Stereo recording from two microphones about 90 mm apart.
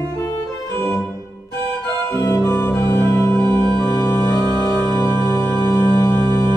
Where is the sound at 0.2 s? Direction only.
30° left (ahead or behind).